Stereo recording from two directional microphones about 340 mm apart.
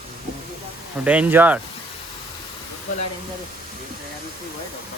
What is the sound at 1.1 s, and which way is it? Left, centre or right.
Speech, centre.